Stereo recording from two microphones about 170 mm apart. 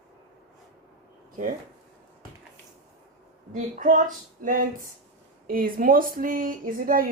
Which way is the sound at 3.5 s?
50° right (ahead or behind).